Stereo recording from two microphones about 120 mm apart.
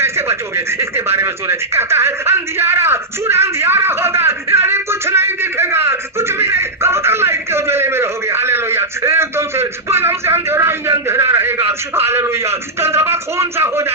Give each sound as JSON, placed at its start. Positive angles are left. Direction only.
{"t": 0.0, "sound": "speech", "side_deg": -20}